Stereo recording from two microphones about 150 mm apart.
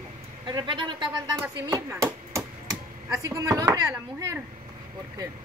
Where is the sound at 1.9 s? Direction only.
20° right (ahead or behind).